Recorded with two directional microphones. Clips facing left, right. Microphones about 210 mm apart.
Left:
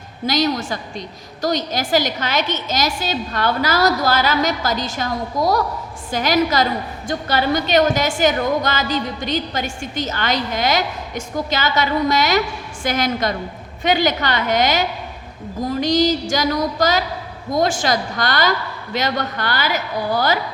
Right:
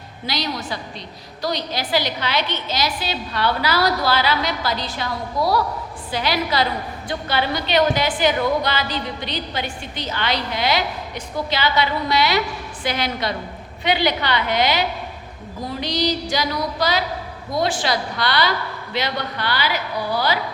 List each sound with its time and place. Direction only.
0.3 s a woman's voice: 45° left (ahead or behind)